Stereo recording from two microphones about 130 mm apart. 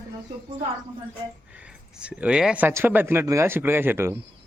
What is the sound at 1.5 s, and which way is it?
Speech, 10° right (ahead or behind).